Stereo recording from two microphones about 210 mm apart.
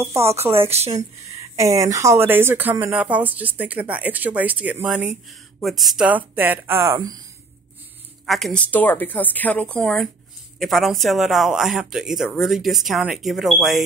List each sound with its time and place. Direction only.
0.7 s speech: 30° right (ahead or behind)
1.6 s speech: 15° right (ahead or behind)
8.3 s a woman's voice: centre (ahead or behind)